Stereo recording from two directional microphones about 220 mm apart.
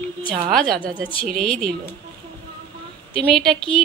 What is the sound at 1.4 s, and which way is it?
Speech, centre (ahead or behind).